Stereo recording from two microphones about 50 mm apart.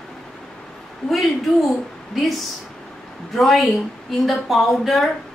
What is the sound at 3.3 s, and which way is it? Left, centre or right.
A woman's voice, centre.